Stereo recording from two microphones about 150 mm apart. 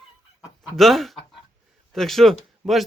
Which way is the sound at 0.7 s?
Centre (ahead or behind).